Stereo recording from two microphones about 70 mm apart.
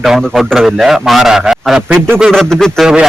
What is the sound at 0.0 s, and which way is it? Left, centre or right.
A man's voice, centre.